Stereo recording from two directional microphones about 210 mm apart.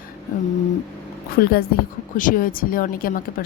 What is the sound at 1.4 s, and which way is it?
A woman's voice, 45° left (ahead or behind).